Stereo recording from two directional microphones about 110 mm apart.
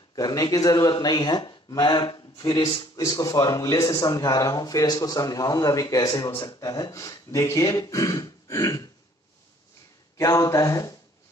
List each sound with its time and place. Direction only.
0.1 s speech: 35° left (ahead or behind)
10.1 s speech: 30° left (ahead or behind)